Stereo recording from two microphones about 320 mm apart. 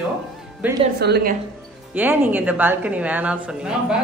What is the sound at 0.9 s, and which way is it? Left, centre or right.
Speech, right.